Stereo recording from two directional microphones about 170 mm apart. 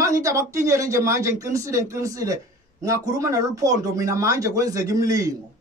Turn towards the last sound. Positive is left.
turn(degrees=-20)  # may be behind; listen again after turning